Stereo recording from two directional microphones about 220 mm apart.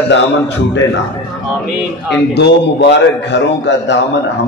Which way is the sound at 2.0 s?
50° left (ahead or behind).